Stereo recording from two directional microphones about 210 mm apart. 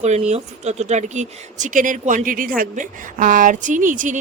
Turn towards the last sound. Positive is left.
turn(degrees=-40)  # may be behind; listen again after turning